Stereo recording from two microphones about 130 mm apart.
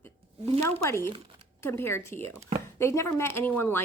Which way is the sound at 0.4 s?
50° right (ahead or behind).